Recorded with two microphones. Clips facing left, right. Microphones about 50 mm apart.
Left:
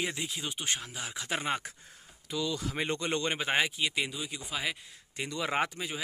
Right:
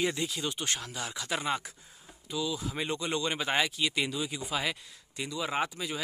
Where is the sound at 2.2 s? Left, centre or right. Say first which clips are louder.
Even; left.